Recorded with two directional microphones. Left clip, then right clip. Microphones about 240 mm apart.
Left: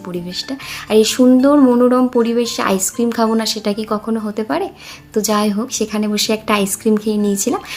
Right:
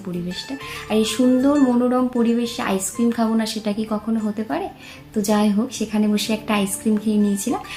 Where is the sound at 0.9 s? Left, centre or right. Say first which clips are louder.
Left 7 dB; left.